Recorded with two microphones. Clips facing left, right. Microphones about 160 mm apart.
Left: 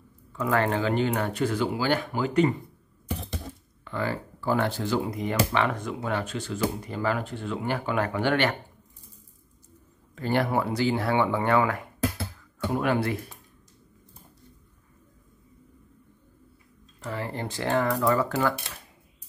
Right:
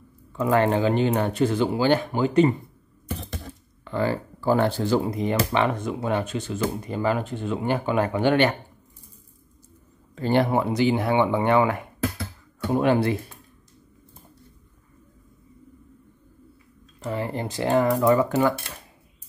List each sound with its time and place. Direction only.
0.3 s speech: 25° right (ahead or behind)
3.8 s speech: 30° right (ahead or behind)
10.1 s speech: 25° right (ahead or behind)
17.0 s speech: 20° right (ahead or behind)